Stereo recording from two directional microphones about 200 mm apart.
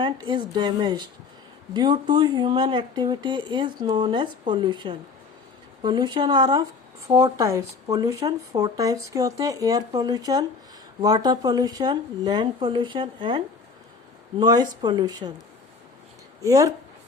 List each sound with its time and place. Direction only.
0.0 s speech: 20° right (ahead or behind)
16.4 s speech: 15° right (ahead or behind)